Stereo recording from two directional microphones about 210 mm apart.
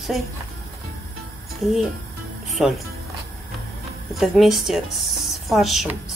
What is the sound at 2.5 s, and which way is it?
Speech, centre (ahead or behind).